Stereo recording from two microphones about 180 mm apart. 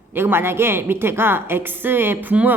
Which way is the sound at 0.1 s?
10° right (ahead or behind).